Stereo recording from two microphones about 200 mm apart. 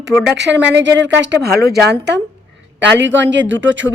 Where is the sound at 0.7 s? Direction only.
65° right (ahead or behind).